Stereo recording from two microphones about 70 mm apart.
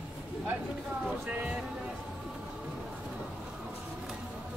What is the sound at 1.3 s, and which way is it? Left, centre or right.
Speech, right.